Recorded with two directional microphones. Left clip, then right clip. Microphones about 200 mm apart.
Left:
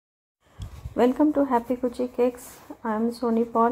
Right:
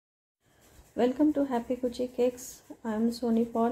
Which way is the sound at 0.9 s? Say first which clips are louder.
Left 5 dB; 15° left (ahead or behind).